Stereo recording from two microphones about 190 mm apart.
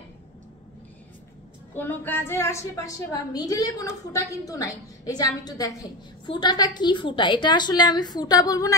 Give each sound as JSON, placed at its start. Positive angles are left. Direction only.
{"t": 1.8, "sound": "a woman's voice", "side_deg": 10}